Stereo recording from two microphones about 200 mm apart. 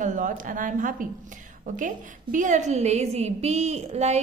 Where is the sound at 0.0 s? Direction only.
40° right (ahead or behind).